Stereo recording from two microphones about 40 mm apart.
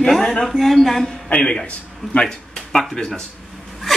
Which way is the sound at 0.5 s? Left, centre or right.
Centre.